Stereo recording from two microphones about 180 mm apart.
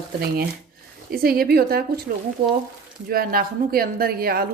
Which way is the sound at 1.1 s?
55° right (ahead or behind).